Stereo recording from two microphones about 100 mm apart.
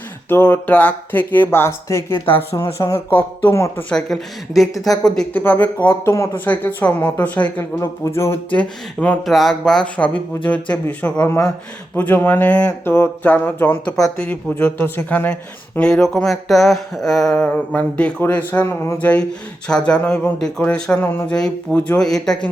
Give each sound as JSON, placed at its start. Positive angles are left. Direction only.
{"t": 0.3, "sound": "speech", "side_deg": 20}
{"t": 2.1, "sound": "speech", "side_deg": 65}
{"t": 3.1, "sound": "speech", "side_deg": 20}
{"t": 3.8, "sound": "speech", "side_deg": 5}
{"t": 5.3, "sound": "a man's voice", "side_deg": 20}
{"t": 7.8, "sound": "speech", "side_deg": 25}
{"t": 8.4, "sound": "a man's voice", "side_deg": 15}
{"t": 9.2, "sound": "a man's voice", "side_deg": 0}
{"t": 13.9, "sound": "speech", "side_deg": 5}
{"t": 14.3, "sound": "a man's voice", "side_deg": 20}
{"t": 17.3, "sound": "a man's voice", "side_deg": 15}
{"t": 18.6, "sound": "speech", "side_deg": 25}
{"t": 19.6, "sound": "a man's voice", "side_deg": 10}